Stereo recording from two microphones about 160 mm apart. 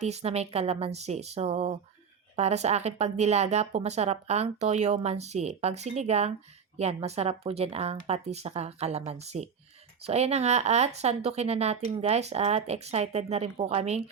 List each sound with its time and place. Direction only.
0.0 s speech: 40° right (ahead or behind)